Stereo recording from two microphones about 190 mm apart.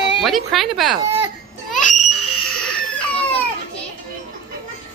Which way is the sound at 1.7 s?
40° left (ahead or behind).